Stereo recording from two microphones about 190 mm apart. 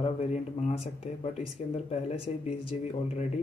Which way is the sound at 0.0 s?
35° left (ahead or behind).